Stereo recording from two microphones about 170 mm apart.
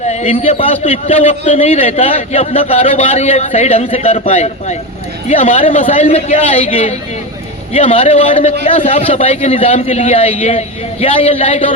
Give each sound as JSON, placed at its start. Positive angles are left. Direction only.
{"t": 0.1, "sound": "a man's voice", "side_deg": 40}